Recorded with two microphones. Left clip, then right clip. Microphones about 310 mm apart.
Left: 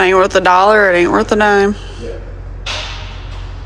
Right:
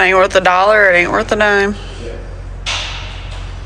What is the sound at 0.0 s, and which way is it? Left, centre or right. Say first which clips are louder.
Speech: even; centre.